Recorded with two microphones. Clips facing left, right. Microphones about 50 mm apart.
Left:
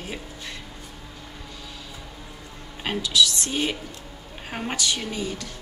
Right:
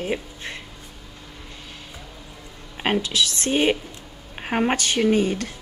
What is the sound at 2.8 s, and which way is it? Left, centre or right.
A woman's voice, right.